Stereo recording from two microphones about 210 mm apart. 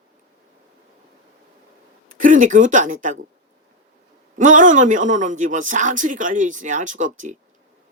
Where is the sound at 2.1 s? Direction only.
40° right (ahead or behind).